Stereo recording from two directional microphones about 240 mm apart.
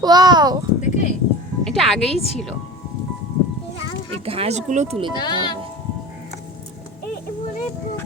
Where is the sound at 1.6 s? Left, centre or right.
Centre.